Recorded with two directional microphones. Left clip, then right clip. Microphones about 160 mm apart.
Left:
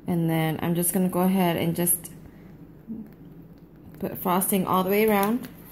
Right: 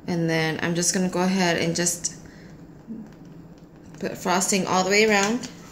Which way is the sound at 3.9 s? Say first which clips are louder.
Right 2 dB; 35° left (ahead or behind).